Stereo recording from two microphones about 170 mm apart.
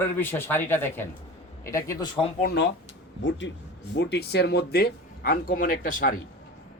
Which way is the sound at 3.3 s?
90° left.